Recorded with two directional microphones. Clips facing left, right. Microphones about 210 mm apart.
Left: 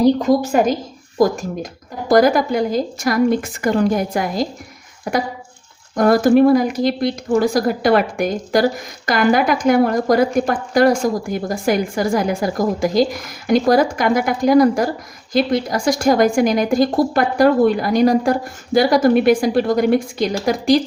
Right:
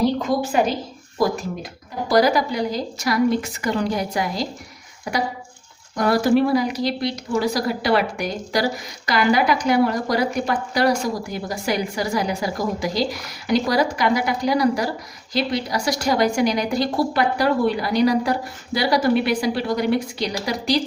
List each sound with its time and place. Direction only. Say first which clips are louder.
0.2 s speech: left 5 dB; 40° left (ahead or behind)
2.0 s speech: left 5 dB; 50° left (ahead or behind)